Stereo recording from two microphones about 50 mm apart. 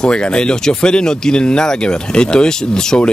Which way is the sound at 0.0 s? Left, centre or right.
Centre.